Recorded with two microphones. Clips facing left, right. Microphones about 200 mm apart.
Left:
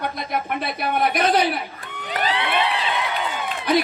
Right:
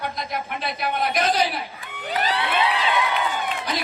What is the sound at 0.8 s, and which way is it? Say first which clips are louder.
Speech: left 2 dB; 55° left (ahead or behind).